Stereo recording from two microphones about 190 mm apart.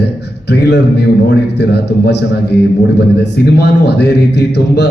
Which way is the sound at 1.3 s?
65° left (ahead or behind).